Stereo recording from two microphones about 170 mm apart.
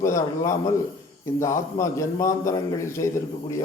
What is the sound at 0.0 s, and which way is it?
A man's voice, 20° left (ahead or behind).